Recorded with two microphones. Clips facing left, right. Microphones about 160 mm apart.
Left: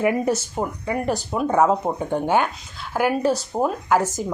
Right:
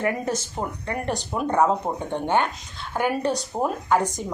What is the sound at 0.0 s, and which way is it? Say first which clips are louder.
A woman's voice: left 5 dB; 10° left (ahead or behind).